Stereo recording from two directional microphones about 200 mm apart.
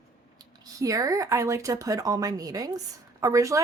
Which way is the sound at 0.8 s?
15° right (ahead or behind).